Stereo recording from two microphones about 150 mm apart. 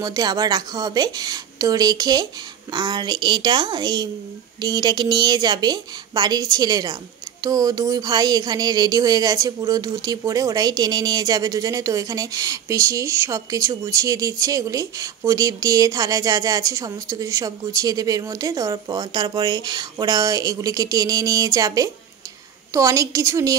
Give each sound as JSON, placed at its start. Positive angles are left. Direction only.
{"t": 0.0, "sound": "speech", "side_deg": -25}